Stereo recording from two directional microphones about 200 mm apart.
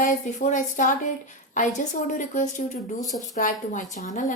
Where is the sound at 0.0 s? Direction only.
40° left (ahead or behind).